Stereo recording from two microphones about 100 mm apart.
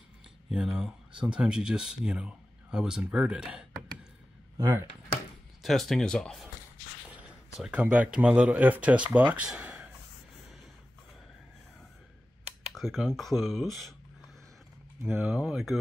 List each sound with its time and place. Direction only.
0.5 s speech: 5° right (ahead or behind)
5.6 s speech: centre (ahead or behind)
7.6 s speech: 10° right (ahead or behind)
9.5 s a sound: 10° right (ahead or behind)
12.7 s speech: centre (ahead or behind)
15.0 s speech: 20° right (ahead or behind)
15.3 s speech: 5° right (ahead or behind)